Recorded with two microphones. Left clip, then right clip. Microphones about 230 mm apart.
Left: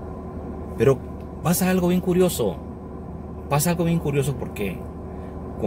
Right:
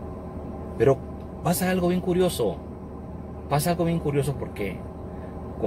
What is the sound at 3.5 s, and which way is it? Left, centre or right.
Speech, centre.